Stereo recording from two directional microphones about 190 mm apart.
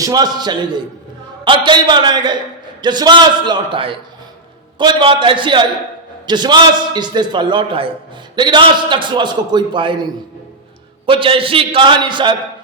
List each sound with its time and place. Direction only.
0.0 s a man's voice: 20° right (ahead or behind)
11.0 s a man's voice: 25° right (ahead or behind)